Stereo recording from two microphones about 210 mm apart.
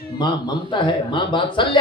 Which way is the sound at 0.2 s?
20° left (ahead or behind).